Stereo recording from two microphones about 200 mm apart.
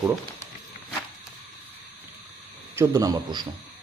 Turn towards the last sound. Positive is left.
turn(degrees=-20)  # may be behind; listen again after turning